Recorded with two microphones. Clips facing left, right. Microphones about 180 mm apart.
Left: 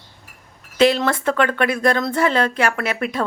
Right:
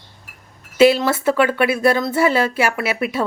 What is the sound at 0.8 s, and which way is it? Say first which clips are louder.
Speech: right 3 dB; 5° right (ahead or behind).